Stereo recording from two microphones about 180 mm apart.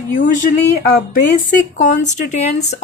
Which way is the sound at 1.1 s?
45° left (ahead or behind).